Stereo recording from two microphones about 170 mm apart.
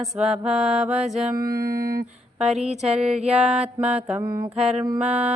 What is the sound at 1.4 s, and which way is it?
Music, 60° right (ahead or behind).